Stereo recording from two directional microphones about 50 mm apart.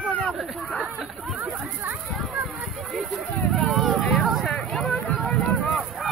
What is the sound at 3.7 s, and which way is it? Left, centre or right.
Vehicle, centre.